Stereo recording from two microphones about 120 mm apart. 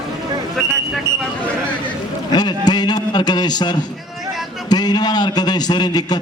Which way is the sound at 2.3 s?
35° left (ahead or behind).